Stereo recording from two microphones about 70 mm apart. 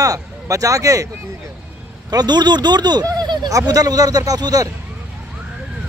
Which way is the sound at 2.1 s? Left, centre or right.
Right.